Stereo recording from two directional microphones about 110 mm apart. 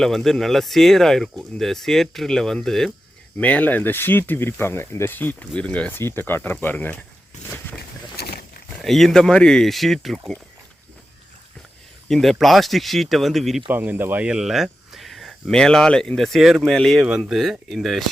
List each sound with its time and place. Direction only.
0.0 s speech: 5° left (ahead or behind)
3.3 s speech: 15° left (ahead or behind)
8.8 s speech: centre (ahead or behind)
12.0 s speech: 5° left (ahead or behind)
13.7 s speech: 15° right (ahead or behind); by 18.0 s centre (ahead or behind)